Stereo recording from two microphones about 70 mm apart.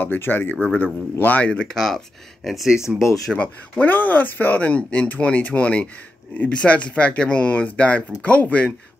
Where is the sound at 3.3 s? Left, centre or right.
Left.